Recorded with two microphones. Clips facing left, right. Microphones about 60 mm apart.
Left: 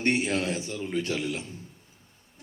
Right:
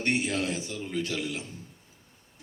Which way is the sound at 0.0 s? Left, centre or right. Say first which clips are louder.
Left 2 dB; left.